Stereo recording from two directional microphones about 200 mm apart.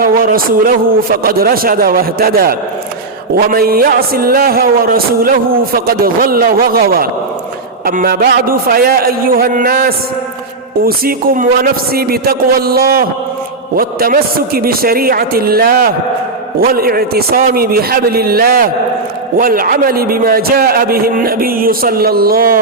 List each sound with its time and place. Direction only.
0.0 s speech: 45° right (ahead or behind)